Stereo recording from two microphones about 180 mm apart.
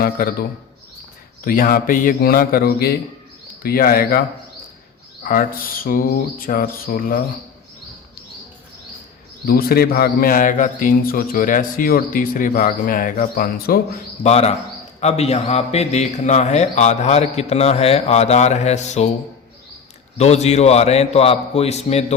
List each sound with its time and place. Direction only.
0.0 s speech: 55° left (ahead or behind)
1.5 s speech: 50° left (ahead or behind)
5.2 s speech: 50° left (ahead or behind)
9.5 s speech: 60° left (ahead or behind)
14.3 s a man's voice: 35° left (ahead or behind)
20.1 s a man's voice: 35° left (ahead or behind)